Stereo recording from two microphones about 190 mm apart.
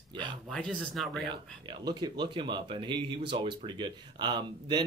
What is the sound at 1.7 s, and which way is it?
Speech, 25° right (ahead or behind).